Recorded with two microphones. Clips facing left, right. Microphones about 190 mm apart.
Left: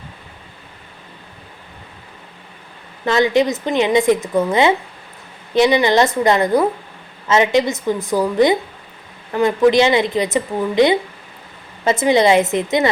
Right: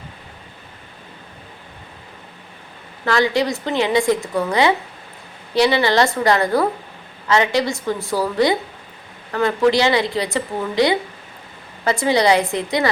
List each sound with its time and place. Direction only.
3.0 s a woman's voice: 20° left (ahead or behind)